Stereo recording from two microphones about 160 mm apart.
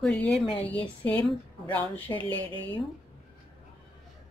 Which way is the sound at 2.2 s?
30° right (ahead or behind).